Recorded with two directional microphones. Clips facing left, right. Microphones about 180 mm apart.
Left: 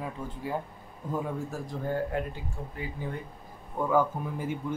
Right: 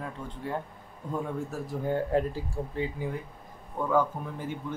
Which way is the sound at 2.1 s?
35° right (ahead or behind).